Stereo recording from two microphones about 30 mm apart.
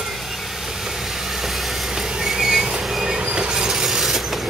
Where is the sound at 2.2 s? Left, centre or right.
Centre.